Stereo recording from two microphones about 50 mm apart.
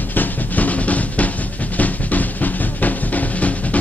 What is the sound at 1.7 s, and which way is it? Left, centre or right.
Drum, left.